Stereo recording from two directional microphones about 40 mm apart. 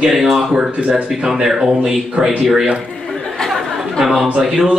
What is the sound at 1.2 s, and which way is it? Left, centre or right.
Speech, centre.